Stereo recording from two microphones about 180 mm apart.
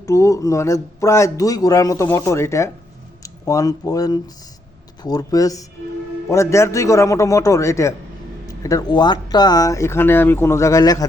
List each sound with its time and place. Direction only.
0.0 s a man's voice: 15° left (ahead or behind)